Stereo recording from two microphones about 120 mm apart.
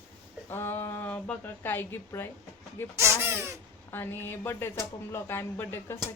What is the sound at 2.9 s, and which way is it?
Speech, 20° right (ahead or behind).